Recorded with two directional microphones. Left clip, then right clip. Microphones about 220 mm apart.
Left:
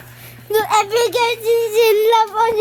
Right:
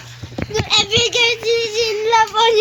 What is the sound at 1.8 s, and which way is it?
Speech, 65° left (ahead or behind).